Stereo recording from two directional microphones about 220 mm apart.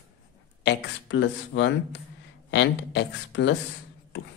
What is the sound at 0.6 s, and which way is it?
Speech, 55° left (ahead or behind).